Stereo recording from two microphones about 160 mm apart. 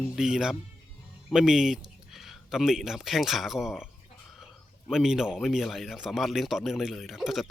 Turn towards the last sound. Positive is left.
turn(degrees=0)  # may be behind; listen again after turning